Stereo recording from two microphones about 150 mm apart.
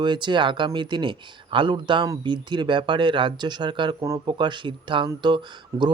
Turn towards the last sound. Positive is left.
turn(degrees=-20)  # may be behind; listen again after turning